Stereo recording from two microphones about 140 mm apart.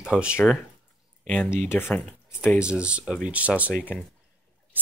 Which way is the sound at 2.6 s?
5° right (ahead or behind).